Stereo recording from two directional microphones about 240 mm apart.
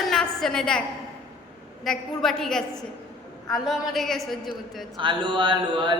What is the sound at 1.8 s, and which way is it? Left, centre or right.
A woman's voice, centre.